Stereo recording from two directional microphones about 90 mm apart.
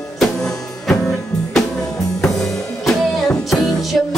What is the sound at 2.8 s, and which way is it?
Music, 5° left (ahead or behind).